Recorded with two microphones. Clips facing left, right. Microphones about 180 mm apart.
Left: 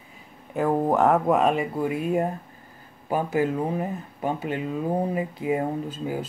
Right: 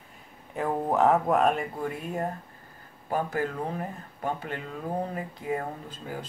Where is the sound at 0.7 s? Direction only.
25° left (ahead or behind).